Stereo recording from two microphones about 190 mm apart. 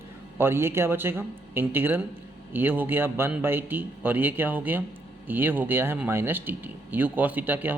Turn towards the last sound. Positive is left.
turn(degrees=-10)  # may be behind; listen again after turning